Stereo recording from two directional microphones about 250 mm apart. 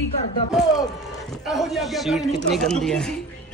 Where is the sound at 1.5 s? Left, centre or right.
Centre.